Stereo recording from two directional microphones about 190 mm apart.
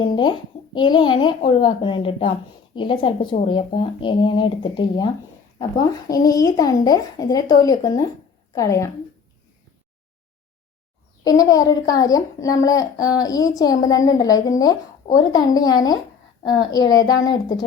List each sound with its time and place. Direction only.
0.0 s a child's voice: 25° left (ahead or behind)
6.1 s a child's voice: 20° left (ahead or behind)
11.2 s a child's voice: 20° left (ahead or behind)